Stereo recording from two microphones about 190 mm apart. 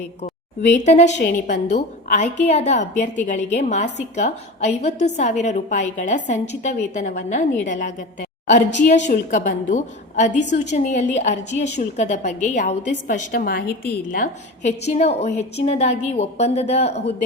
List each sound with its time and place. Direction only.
0.7 s a woman's voice: 40° left (ahead or behind)
12.6 s a woman's voice: 50° left (ahead or behind); by 17.1 s 35° left (ahead or behind)